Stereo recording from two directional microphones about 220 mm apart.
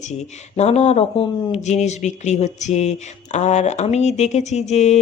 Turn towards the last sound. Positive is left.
turn(degrees=30)  # may be behind; listen again after turning